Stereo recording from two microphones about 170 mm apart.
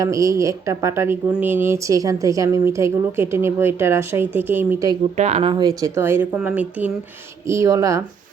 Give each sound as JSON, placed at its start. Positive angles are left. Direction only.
{"t": 0.0, "sound": "speech", "side_deg": -20}
{"t": 5.1, "sound": "speech", "side_deg": -40}